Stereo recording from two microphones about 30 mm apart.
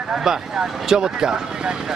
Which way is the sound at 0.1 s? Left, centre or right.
Right.